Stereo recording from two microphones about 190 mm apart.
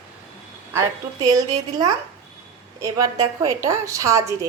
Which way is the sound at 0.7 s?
15° right (ahead or behind).